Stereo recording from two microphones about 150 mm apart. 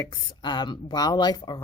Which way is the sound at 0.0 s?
30° left (ahead or behind).